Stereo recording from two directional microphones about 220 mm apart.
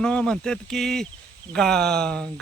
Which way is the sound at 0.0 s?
5° left (ahead or behind).